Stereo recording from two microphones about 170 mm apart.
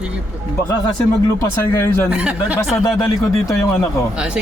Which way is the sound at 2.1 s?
5° right (ahead or behind).